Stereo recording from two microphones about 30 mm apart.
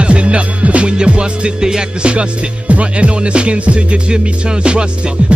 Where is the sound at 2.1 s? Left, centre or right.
Right.